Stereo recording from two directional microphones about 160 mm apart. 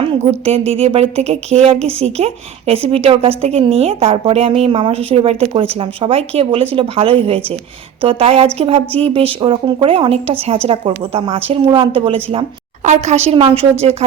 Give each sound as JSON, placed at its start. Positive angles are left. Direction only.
{"t": 0.4, "sound": "a woman's voice", "side_deg": -35}